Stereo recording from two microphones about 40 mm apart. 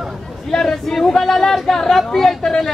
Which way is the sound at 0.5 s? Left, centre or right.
Centre.